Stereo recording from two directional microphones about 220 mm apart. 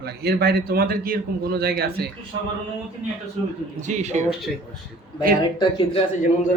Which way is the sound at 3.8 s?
30° right (ahead or behind).